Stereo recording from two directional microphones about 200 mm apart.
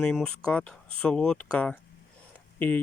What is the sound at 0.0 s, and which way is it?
Speech, 5° left (ahead or behind).